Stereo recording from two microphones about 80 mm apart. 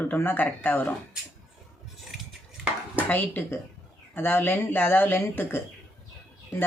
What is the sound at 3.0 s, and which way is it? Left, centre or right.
Speech, left.